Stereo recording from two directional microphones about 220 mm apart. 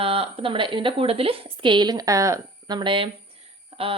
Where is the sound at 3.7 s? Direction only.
25° right (ahead or behind).